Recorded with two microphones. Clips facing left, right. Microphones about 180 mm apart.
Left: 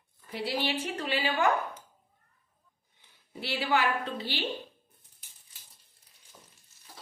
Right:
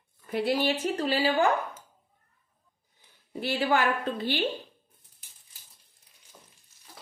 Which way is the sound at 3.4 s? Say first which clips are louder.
Right 3 dB; 50° right (ahead or behind).